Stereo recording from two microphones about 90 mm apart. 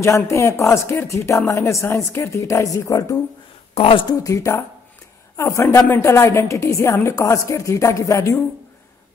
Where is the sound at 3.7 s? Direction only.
80° left.